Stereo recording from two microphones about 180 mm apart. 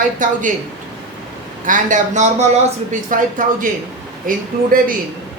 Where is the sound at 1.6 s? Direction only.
45° right (ahead or behind).